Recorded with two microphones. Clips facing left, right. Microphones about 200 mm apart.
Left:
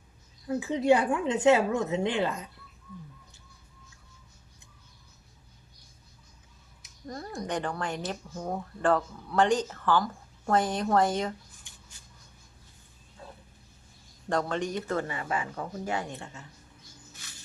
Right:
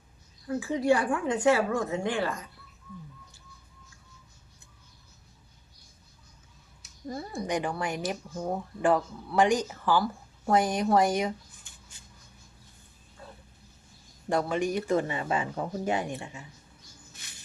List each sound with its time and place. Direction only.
0.4 s a woman's voice: 20° left (ahead or behind)
7.1 s speech: 5° right (ahead or behind)
14.3 s speech: 10° right (ahead or behind)